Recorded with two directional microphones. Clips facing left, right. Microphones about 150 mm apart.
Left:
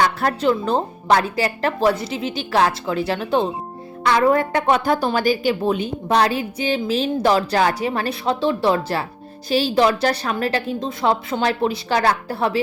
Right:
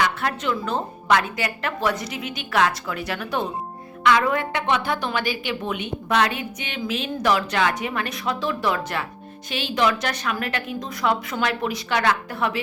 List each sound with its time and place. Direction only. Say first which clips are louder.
0.0 s a woman's voice: left 5 dB; 35° left (ahead or behind)